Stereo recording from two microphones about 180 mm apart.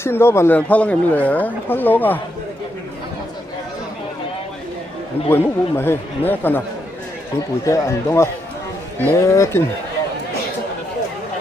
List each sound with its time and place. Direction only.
0.0 s speech: 15° left (ahead or behind)
5.3 s speech: 15° left (ahead or behind)